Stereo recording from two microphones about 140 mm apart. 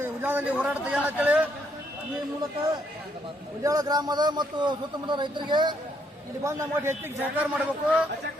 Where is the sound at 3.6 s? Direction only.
25° right (ahead or behind).